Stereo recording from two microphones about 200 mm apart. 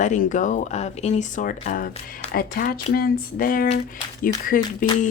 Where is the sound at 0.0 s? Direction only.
40° left (ahead or behind).